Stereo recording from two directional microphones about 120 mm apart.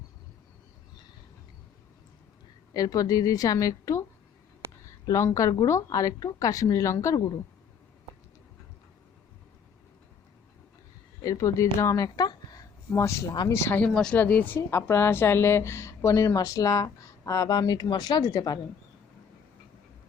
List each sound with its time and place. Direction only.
2.7 s a woman's voice: 30° left (ahead or behind)
11.2 s a woman's voice: 30° left (ahead or behind)